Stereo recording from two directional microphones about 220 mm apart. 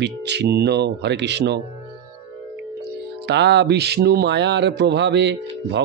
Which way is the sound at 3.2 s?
50° right (ahead or behind).